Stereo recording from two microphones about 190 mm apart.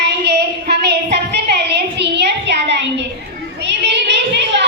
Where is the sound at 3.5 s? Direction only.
65° right (ahead or behind).